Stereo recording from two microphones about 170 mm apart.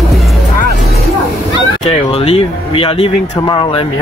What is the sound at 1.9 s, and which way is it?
Speech, 35° left (ahead or behind).